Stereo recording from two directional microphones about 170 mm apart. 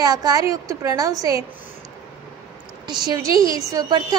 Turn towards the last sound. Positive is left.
turn(degrees=-25)  # may be behind; listen again after turning